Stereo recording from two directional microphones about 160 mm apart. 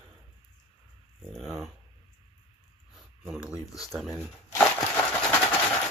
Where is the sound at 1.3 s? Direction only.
Centre (ahead or behind).